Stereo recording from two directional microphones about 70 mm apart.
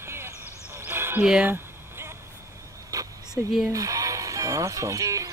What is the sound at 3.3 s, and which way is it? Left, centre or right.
Speech, centre.